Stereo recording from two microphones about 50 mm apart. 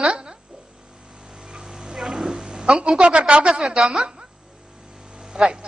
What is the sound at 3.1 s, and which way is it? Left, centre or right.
A man's voice, centre.